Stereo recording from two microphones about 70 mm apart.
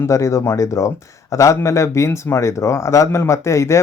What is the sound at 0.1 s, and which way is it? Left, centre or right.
Speech, left.